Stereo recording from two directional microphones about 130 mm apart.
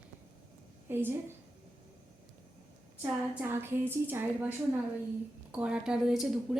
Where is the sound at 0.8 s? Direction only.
15° right (ahead or behind).